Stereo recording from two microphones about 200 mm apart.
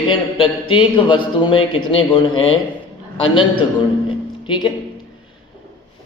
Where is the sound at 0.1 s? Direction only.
25° left (ahead or behind).